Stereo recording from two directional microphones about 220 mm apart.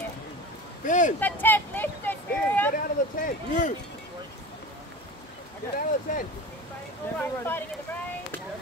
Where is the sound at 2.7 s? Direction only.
35° left (ahead or behind).